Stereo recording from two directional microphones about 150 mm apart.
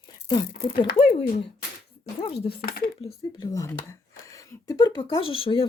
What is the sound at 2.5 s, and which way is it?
Speech, 90° left.